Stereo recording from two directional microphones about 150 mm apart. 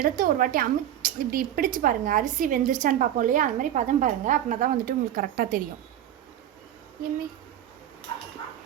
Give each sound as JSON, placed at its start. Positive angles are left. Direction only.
{"t": 0.0, "sound": "a woman's voice", "side_deg": -70}